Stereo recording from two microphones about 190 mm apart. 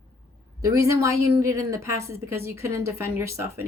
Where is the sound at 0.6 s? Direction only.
15° right (ahead or behind).